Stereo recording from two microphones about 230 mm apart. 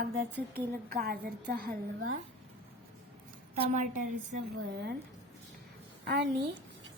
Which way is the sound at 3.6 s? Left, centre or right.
Right.